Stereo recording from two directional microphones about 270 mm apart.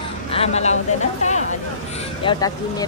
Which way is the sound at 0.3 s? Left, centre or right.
Left.